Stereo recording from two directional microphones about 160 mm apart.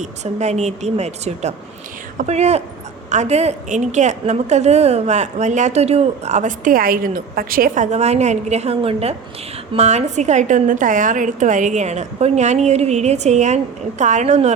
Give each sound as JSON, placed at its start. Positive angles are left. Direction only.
{"t": 0.0, "sound": "a woman's voice", "side_deg": -45}
{"t": 7.9, "sound": "a woman's voice", "side_deg": -45}